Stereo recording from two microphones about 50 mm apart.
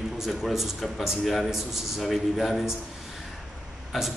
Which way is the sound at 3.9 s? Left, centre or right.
Centre.